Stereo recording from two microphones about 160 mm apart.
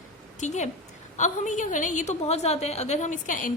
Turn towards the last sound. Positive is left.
turn(degrees=55)  # may be behind; listen again after turning